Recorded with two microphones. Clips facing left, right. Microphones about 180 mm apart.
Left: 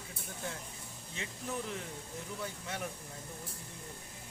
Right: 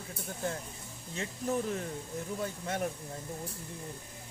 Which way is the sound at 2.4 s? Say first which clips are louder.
Right 6 dB; 45° right (ahead or behind).